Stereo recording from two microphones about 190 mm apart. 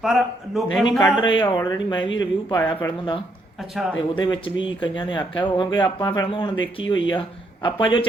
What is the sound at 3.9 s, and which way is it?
Speech, 25° left (ahead or behind).